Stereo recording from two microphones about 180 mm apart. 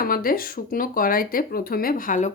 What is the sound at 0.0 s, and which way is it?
Speech, 55° left (ahead or behind).